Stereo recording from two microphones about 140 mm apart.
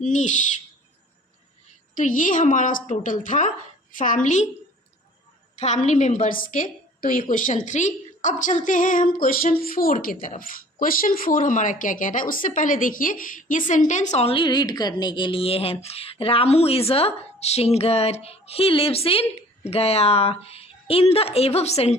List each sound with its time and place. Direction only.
0.0 s a woman's voice: 60° left (ahead or behind)
2.0 s a woman's voice: 70° left (ahead or behind)
5.5 s a woman's voice: 55° left (ahead or behind)